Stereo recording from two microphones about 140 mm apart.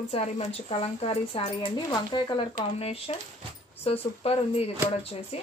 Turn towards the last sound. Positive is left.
turn(degrees=45)  # may be behind; listen again after turning